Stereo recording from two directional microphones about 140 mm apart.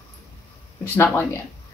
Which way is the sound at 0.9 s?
15° left (ahead or behind).